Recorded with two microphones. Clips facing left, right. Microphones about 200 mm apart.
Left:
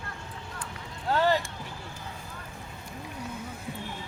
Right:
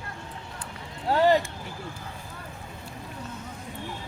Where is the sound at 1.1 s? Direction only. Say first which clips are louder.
Right 4 dB; 15° right (ahead or behind).